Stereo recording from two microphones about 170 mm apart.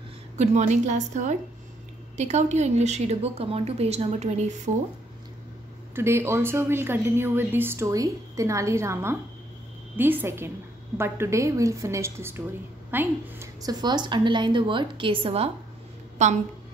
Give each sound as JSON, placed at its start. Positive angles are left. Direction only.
{"t": 0.4, "sound": "a woman's voice", "side_deg": -45}
{"t": 5.9, "sound": "a woman's voice", "side_deg": -15}